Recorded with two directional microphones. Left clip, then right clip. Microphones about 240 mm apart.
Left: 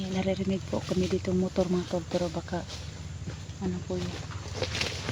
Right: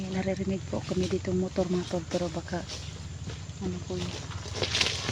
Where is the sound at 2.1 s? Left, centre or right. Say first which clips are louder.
Left 1 dB; centre.